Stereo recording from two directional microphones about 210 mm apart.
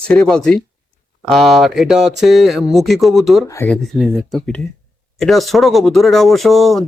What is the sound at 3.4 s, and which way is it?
Speech, 10° left (ahead or behind).